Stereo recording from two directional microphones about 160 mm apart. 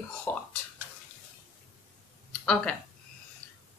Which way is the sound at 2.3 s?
5° left (ahead or behind).